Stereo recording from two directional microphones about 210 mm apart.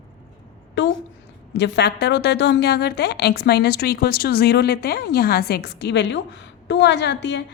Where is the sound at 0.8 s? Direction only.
55° left (ahead or behind).